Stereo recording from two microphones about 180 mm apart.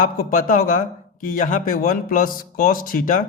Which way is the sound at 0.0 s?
50° left (ahead or behind).